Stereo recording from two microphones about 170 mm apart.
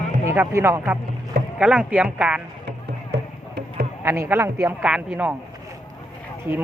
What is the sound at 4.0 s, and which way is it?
Speech, 15° right (ahead or behind).